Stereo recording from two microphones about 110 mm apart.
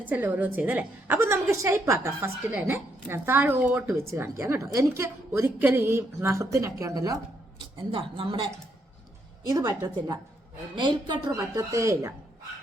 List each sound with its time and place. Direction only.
0.0 s a woman's voice: 15° right (ahead or behind); by 7.2 s 30° right (ahead or behind)
7.8 s speech: 55° right (ahead or behind)
9.5 s a woman's voice: 35° right (ahead or behind)
11.3 s a woman's voice: 30° right (ahead or behind)